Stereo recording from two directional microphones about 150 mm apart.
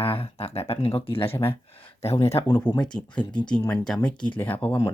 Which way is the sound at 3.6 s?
25° left (ahead or behind).